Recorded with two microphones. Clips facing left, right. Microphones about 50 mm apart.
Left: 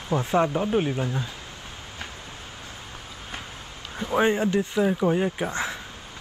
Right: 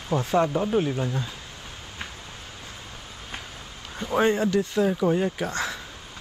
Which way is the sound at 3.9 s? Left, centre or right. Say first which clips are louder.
Even; centre.